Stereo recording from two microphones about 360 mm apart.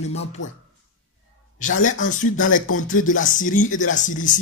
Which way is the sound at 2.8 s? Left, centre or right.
Left.